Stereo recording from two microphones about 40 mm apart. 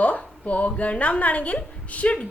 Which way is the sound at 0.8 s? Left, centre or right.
Left.